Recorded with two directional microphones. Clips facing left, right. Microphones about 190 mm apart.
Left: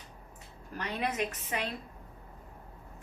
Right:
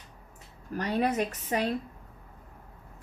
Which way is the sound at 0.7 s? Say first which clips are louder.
Right 7 dB; 40° right (ahead or behind).